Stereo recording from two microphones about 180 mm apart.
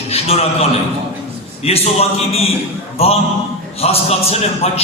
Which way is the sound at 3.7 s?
35° left (ahead or behind).